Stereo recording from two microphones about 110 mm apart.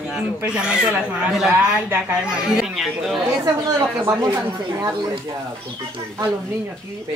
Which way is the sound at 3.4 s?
35° right (ahead or behind).